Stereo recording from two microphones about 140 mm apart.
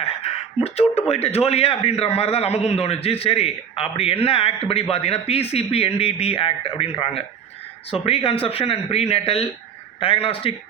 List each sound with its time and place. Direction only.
0.6 s a man's voice: 45° left (ahead or behind)